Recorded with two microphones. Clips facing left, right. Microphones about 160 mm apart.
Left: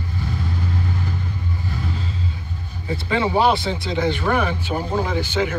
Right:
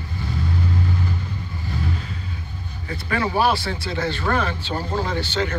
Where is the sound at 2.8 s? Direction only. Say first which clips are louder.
Left 3 dB; 20° left (ahead or behind).